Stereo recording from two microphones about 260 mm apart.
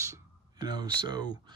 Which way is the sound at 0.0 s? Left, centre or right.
Centre.